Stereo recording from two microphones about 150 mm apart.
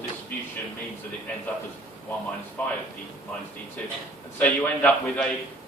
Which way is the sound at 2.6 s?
10° left (ahead or behind).